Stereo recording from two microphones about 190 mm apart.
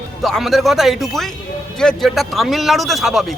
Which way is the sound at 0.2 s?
Centre (ahead or behind).